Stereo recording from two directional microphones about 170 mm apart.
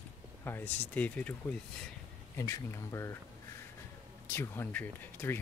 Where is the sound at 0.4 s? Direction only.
15° left (ahead or behind).